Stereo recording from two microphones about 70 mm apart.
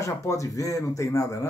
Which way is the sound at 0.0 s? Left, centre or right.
Left.